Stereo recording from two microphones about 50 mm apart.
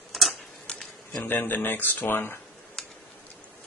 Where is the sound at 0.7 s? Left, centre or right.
Centre.